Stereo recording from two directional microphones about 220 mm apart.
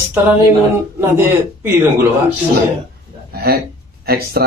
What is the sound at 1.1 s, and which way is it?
Speech, 10° right (ahead or behind).